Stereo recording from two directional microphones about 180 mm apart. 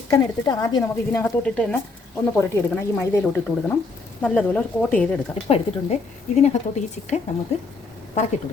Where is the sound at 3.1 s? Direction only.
10° left (ahead or behind).